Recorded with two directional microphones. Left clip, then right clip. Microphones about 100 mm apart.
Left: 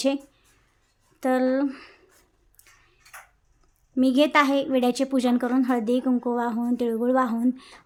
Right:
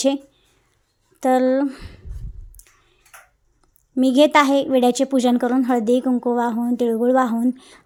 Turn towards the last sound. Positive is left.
turn(degrees=-25)  # may be behind; listen again after turning